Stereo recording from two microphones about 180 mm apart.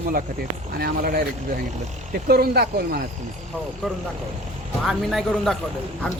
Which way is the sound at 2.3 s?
60° right (ahead or behind).